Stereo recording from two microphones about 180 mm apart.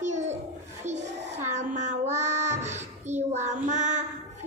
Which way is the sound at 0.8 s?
40° right (ahead or behind).